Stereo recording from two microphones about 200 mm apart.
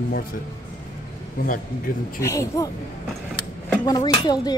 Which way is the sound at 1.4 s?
45° left (ahead or behind).